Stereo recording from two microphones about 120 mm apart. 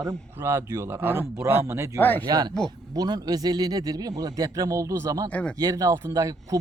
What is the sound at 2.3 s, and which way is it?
A man's voice, 35° right (ahead or behind).